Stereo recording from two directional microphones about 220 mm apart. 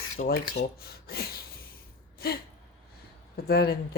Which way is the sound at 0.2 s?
35° left (ahead or behind).